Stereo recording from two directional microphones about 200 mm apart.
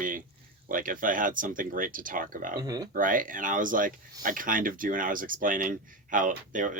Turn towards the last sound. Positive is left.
turn(degrees=-40)  # may be behind; listen again after turning